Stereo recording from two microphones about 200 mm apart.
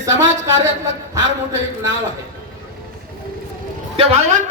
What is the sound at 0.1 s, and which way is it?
Speech, 65° right (ahead or behind).